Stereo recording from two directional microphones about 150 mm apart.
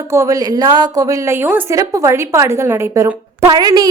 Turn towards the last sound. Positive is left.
turn(degrees=-25)  # may be behind; listen again after turning